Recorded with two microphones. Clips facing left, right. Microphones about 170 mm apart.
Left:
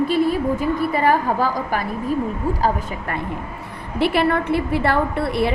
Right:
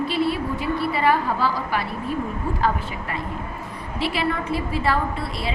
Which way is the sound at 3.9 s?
55° left (ahead or behind).